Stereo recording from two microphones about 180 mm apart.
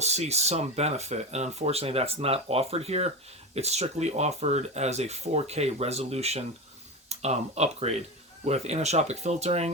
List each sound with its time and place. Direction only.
0.0 s speech: 35° right (ahead or behind)